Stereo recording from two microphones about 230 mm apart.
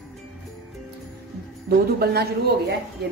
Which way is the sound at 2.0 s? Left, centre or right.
Right.